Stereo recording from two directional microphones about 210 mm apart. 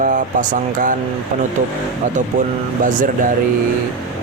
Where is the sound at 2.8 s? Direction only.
40° right (ahead or behind).